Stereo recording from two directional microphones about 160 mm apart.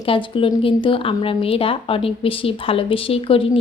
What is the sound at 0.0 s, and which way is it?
Speech, 35° left (ahead or behind).